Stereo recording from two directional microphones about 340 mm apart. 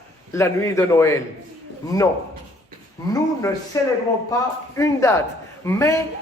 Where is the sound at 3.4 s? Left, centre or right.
Centre.